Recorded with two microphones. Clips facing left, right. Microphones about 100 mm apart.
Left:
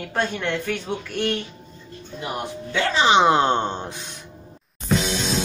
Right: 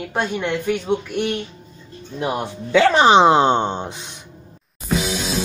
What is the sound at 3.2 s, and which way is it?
Speech, 25° right (ahead or behind).